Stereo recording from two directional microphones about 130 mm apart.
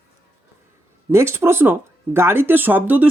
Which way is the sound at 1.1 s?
20° right (ahead or behind).